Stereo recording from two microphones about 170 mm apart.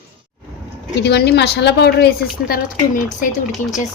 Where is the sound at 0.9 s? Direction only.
80° left; by 3.2 s 55° left (ahead or behind).